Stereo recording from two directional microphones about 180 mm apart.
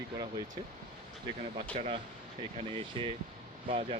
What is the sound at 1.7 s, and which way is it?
Speech, 30° right (ahead or behind).